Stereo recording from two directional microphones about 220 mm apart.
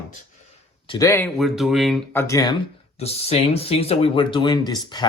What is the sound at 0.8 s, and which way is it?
Speech, 20° left (ahead or behind).